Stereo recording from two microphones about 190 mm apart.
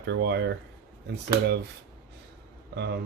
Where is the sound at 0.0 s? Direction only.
65° right (ahead or behind).